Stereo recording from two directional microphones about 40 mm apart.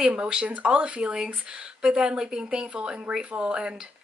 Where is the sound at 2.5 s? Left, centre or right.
Right.